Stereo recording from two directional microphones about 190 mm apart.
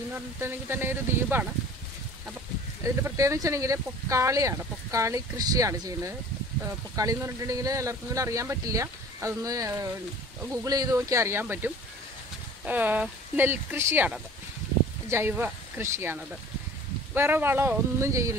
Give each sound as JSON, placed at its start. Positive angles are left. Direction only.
{"t": 0.1, "sound": "speech", "side_deg": -10}
{"t": 2.8, "sound": "speech", "side_deg": -15}